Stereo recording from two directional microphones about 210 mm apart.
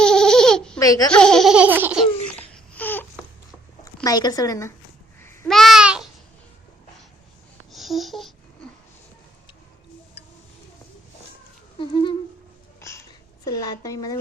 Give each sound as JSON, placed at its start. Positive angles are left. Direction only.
{"t": 0.0, "sound": "baby laughter", "side_deg": 5}
{"t": 0.8, "sound": "speech", "side_deg": 15}
{"t": 1.1, "sound": "baby laughter", "side_deg": 5}
{"t": 2.3, "sound": "baby cry", "side_deg": 10}
{"t": 3.8, "sound": "speech", "side_deg": 15}
{"t": 5.2, "sound": "a sound", "side_deg": 10}
{"t": 5.5, "sound": "babbling", "side_deg": 0}
{"t": 7.7, "sound": "babbling", "side_deg": 0}
{"t": 11.8, "sound": "speech", "side_deg": 20}
{"t": 12.8, "sound": "a sound", "side_deg": 15}